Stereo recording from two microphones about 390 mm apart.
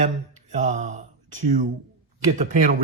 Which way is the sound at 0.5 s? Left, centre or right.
Centre.